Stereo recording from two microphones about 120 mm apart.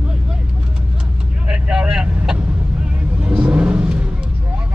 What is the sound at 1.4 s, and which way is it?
Vehicle, 5° right (ahead or behind).